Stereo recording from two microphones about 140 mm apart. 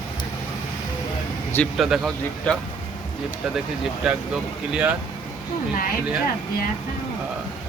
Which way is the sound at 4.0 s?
5° right (ahead or behind).